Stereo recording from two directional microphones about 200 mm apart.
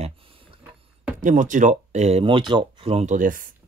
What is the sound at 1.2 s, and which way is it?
Speech, 40° right (ahead or behind).